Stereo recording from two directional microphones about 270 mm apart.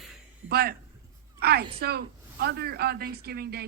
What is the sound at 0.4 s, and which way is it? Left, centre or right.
A woman's voice, right.